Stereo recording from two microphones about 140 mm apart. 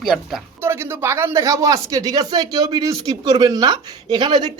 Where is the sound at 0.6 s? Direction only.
15° right (ahead or behind).